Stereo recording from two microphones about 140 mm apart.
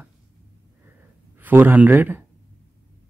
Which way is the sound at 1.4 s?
15° right (ahead or behind).